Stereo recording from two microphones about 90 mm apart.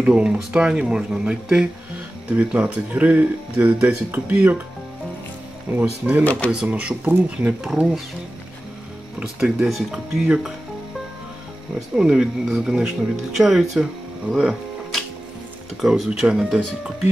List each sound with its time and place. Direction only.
0.0 s speech: 10° right (ahead or behind)
5.8 s speech: 20° right (ahead or behind)
9.2 s speech: 10° right (ahead or behind)
11.9 s speech: 10° right (ahead or behind)
14.3 s music: 5° right (ahead or behind)
15.8 s speech: 5° right (ahead or behind)